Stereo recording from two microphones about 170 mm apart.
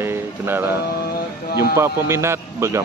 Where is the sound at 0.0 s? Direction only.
15° right (ahead or behind).